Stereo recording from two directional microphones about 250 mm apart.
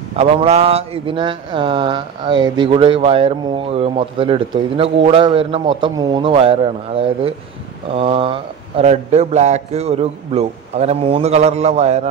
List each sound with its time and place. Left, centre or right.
0.1 s mantra: right